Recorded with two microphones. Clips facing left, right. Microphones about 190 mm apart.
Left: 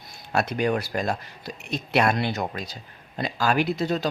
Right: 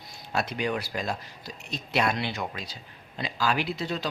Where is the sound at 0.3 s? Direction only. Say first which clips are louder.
Left 5 dB; 50° left (ahead or behind).